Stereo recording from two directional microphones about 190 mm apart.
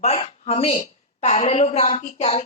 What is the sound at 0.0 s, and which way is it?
A woman's voice, 35° left (ahead or behind).